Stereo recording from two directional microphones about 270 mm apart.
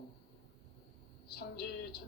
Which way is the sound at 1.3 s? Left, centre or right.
Left.